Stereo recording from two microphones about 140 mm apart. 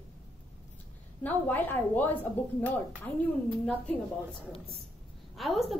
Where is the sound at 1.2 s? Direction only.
10° left (ahead or behind).